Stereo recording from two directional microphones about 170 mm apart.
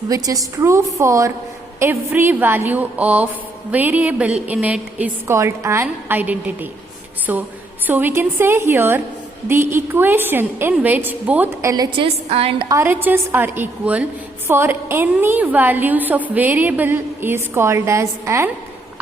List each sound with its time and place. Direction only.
0.1 s a woman's voice: 20° right (ahead or behind)